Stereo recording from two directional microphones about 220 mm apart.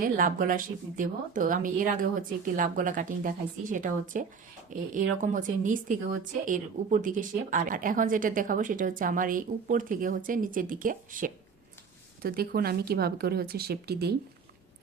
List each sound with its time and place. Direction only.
0.0 s speech: 40° right (ahead or behind)